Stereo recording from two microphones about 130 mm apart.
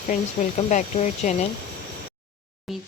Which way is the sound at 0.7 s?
70° left (ahead or behind).